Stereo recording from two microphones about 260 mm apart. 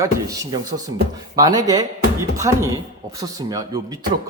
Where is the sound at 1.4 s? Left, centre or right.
Centre.